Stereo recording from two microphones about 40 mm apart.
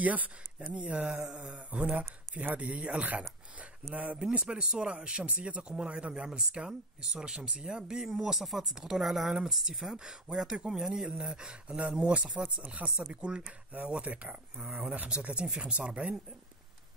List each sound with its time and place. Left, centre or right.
0.0 s speech: right
0.7 s mantra: right
4.4 s speech: right
8.1 s speech: centre
11.2 s speech: right
13.7 s mantra: right
14.7 s speech: right